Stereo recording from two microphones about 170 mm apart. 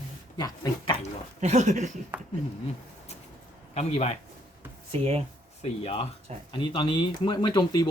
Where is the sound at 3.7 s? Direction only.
40° left (ahead or behind).